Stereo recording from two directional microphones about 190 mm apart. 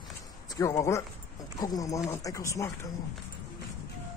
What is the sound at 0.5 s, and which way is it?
Speech, 15° left (ahead or behind).